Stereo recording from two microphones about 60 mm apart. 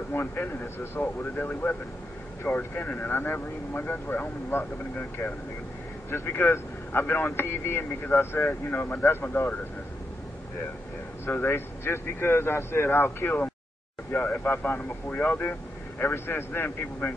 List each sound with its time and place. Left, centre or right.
0.1 s a man's voice: left
11.3 s a man's voice: left
16.0 s a man's voice: left